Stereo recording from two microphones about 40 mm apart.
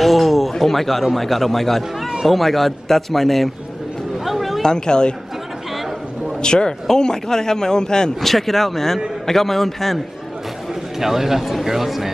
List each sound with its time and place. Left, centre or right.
0.0 s a sound: centre
1.1 s speech: centre
4.2 s a sound: centre
4.6 s speech: centre
6.4 s speech: centre
8.2 s speech: centre
10.7 s a man's voice: centre